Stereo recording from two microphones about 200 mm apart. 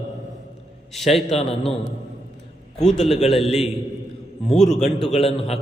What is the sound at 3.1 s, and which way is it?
Speech, 30° left (ahead or behind).